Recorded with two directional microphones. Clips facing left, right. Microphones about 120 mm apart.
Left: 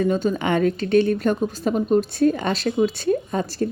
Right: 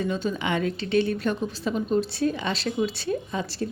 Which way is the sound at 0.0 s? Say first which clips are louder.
Left 6 dB; 45° left (ahead or behind).